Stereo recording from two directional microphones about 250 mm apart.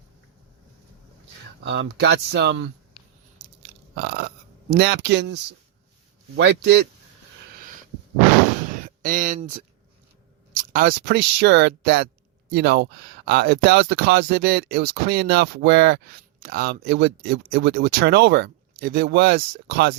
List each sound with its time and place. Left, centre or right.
1.6 s speech: right
3.9 s burping: right
4.7 s speech: right
7.5 s a sound: right
8.8 s speech: right